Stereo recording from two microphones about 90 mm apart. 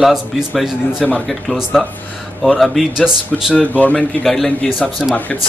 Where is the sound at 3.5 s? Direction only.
15° left (ahead or behind).